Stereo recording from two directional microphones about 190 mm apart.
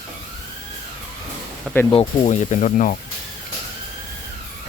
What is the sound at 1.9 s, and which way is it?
Speech, 35° left (ahead or behind).